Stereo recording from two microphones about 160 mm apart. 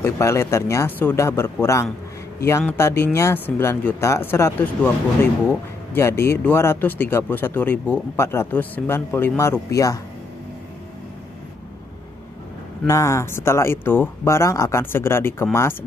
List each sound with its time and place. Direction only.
0.0 s speech: 15° left (ahead or behind)
12.8 s speech: 20° left (ahead or behind)